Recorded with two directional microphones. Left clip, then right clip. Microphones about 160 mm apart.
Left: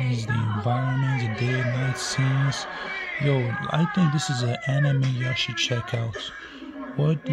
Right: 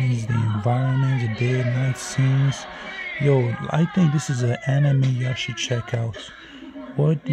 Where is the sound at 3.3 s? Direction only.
30° right (ahead or behind).